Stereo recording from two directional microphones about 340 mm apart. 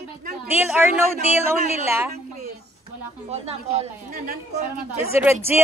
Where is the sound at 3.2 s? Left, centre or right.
Centre.